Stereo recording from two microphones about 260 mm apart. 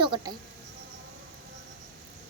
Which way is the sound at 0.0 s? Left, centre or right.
Centre.